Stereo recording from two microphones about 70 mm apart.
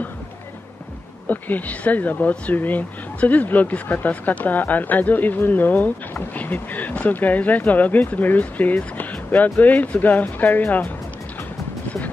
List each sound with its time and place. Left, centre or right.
1.3 s speech: left